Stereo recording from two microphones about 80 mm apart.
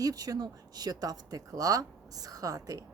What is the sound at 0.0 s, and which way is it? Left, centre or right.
Speech, right.